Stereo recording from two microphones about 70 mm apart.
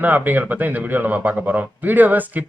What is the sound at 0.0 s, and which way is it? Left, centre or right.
A man's voice, right.